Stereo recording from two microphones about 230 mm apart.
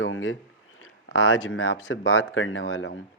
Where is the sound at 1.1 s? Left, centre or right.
Left.